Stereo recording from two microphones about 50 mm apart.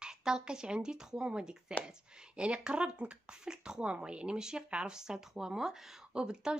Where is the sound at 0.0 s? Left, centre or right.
Centre.